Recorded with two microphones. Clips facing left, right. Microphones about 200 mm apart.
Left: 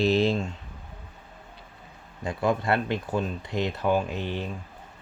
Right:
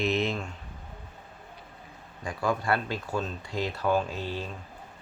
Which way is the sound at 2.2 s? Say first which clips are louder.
Left 3 dB; 25° left (ahead or behind).